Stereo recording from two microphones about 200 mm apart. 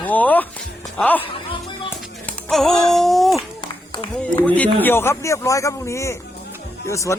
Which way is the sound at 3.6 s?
20° left (ahead or behind).